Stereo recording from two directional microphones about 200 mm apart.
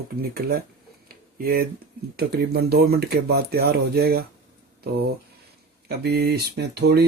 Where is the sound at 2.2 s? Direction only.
50° right (ahead or behind).